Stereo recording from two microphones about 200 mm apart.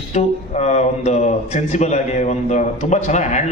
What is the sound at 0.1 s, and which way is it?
Speech, 35° left (ahead or behind).